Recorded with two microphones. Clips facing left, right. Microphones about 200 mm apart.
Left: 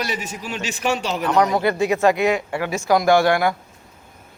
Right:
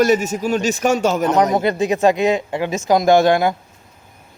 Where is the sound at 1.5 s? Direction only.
20° right (ahead or behind).